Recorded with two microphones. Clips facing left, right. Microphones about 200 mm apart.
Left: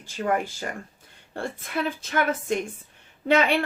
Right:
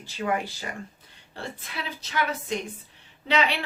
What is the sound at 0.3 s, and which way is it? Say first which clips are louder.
A woman's voice: left 3 dB; 45° left (ahead or behind).